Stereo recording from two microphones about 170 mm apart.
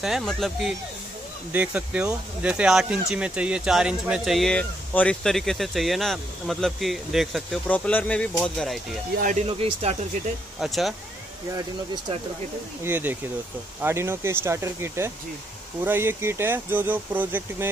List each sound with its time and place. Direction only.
0.0 s speech: centre (ahead or behind)
9.2 s speech: 45° right (ahead or behind)
9.5 s speech: 35° right (ahead or behind)
10.6 s speech: centre (ahead or behind)
12.8 s speech: 10° right (ahead or behind)